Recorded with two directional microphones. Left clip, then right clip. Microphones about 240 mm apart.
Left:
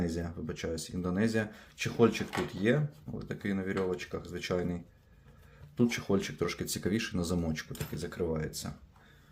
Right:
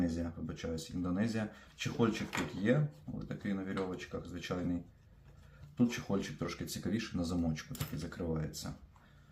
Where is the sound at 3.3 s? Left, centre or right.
Left.